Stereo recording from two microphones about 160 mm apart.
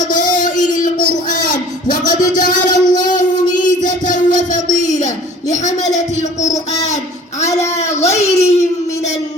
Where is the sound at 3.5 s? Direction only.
55° left (ahead or behind).